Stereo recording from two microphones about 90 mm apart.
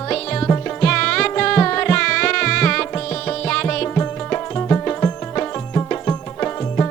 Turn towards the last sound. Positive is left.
turn(degrees=20)  # may be behind; listen again after turning